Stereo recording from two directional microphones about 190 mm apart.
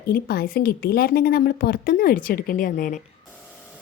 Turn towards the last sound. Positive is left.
turn(degrees=45)  # may be behind; listen again after turning